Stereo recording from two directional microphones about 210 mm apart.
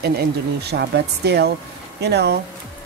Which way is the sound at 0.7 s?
50° right (ahead or behind).